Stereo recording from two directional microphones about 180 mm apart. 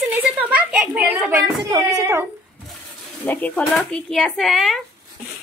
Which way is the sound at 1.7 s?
20° right (ahead or behind).